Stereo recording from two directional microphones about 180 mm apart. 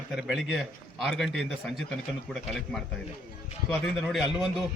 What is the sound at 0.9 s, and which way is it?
Speech, centre (ahead or behind).